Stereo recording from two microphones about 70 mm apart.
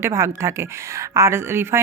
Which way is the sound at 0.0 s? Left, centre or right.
Right.